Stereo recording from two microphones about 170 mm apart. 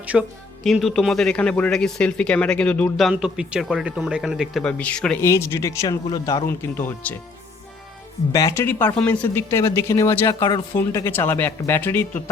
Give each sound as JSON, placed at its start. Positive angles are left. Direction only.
{"t": 0.0, "sound": "speech", "side_deg": -5}
{"t": 3.1, "sound": "speech", "side_deg": -5}
{"t": 8.3, "sound": "speech", "side_deg": 20}